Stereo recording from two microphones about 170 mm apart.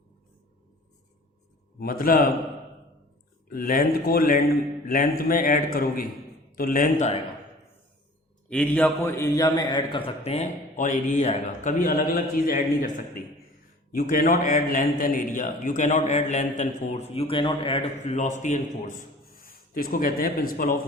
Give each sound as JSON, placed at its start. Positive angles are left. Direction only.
{"t": 1.8, "sound": "a man's voice", "side_deg": 60}
{"t": 3.5, "sound": "a man's voice", "side_deg": 55}
{"t": 8.4, "sound": "a man's voice", "side_deg": 10}
{"t": 10.2, "sound": "a man's voice", "side_deg": 40}
{"t": 13.9, "sound": "a man's voice", "side_deg": 55}